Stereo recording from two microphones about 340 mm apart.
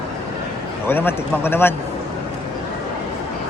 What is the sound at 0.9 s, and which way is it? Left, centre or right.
Speech, centre.